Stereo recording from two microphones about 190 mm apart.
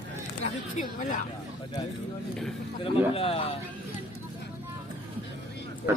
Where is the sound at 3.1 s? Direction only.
30° left (ahead or behind).